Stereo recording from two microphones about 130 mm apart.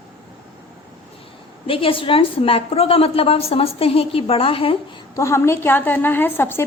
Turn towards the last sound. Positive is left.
turn(degrees=15)  # may be behind; listen again after turning